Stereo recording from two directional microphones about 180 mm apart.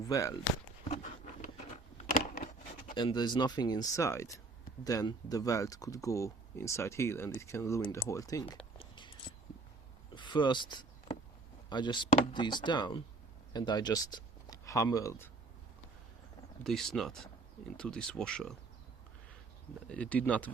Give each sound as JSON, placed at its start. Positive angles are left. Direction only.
{"t": 0.0, "sound": "speech", "side_deg": 15}
{"t": 0.9, "sound": "a sound", "side_deg": 40}
{"t": 2.9, "sound": "speech", "side_deg": 25}
{"t": 8.8, "sound": "a sound", "side_deg": 25}
{"t": 10.2, "sound": "speech", "side_deg": 25}
{"t": 16.6, "sound": "speech", "side_deg": 0}
{"t": 19.9, "sound": "speech", "side_deg": 5}